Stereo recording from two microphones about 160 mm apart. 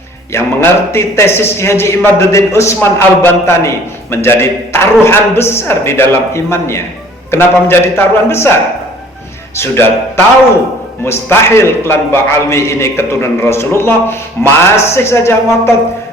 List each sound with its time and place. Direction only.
0.3 s a man's voice: 15° left (ahead or behind)
9.6 s a man's voice: 15° left (ahead or behind)